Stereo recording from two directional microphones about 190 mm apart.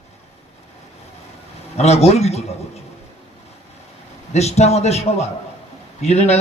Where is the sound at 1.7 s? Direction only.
35° left (ahead or behind).